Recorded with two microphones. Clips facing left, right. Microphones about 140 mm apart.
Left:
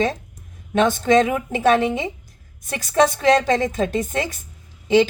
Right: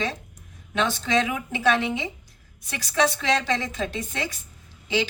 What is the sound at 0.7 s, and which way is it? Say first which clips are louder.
A woman's voice: left 8 dB; 50° left (ahead or behind).